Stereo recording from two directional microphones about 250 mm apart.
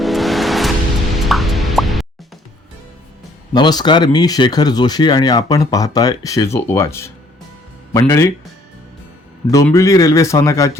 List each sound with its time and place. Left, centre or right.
0.0 s music: centre
3.5 s speech: centre
9.5 s speech: centre